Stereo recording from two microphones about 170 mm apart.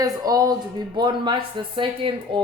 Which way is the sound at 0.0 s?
20° right (ahead or behind).